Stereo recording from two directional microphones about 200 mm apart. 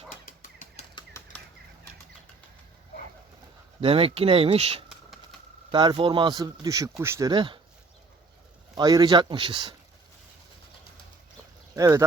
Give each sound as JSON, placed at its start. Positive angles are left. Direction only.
{"t": 0.3, "sound": "bird flight", "side_deg": 40}
{"t": 3.8, "sound": "speech", "side_deg": -30}
{"t": 8.7, "sound": "speech", "side_deg": -20}
{"t": 11.7, "sound": "speech", "side_deg": -15}